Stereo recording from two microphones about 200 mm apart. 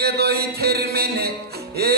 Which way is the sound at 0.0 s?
50° right (ahead or behind).